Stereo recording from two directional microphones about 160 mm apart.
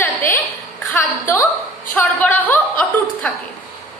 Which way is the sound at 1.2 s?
15° left (ahead or behind).